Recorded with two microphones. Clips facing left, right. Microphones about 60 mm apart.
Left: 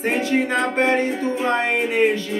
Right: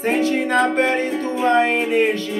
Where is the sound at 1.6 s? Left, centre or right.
Centre.